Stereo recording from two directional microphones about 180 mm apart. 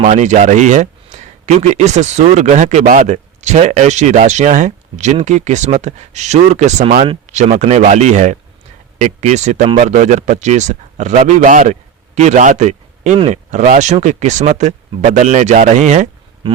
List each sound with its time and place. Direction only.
0.0 s speech: 40° right (ahead or behind)